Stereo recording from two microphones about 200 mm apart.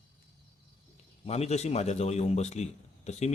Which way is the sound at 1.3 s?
30° left (ahead or behind).